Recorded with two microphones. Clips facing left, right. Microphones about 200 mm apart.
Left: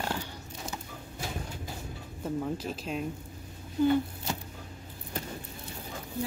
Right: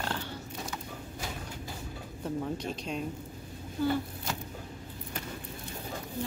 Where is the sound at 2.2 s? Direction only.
5° left (ahead or behind).